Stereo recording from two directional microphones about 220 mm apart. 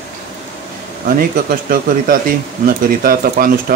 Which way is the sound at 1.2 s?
40° right (ahead or behind).